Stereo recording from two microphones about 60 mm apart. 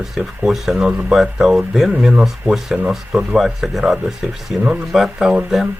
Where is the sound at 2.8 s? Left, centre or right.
Centre.